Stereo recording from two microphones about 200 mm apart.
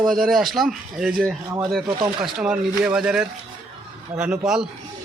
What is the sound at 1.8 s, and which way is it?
Speech, 20° right (ahead or behind).